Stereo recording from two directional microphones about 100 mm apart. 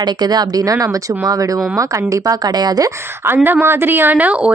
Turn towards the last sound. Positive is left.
turn(degrees=-15)  # may be behind; listen again after turning